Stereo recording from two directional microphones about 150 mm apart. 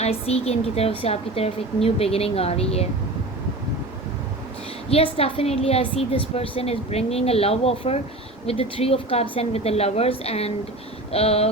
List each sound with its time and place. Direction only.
0.0 s a woman's voice: 45° left (ahead or behind)
4.9 s a woman's voice: 40° left (ahead or behind)